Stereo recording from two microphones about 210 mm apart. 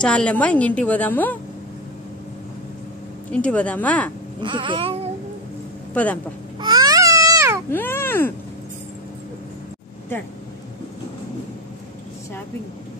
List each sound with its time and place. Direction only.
0.0 s a woman's voice: 5° left (ahead or behind)
3.3 s a woman's voice: 5° left (ahead or behind)
4.4 s a sound: 25° right (ahead or behind)
6.6 s babbling: 20° right (ahead or behind)
7.7 s speech: 10° left (ahead or behind)